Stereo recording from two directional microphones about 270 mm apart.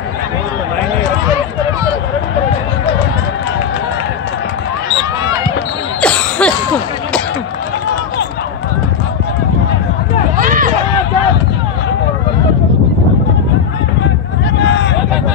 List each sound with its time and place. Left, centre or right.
5.9 s cough: centre
10.3 s run: right
14.6 s a sound: left